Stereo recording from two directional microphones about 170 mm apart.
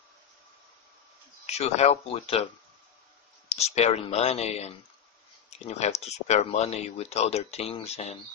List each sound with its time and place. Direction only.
1.4 s speech: 40° left (ahead or behind)
3.4 s speech: 40° left (ahead or behind)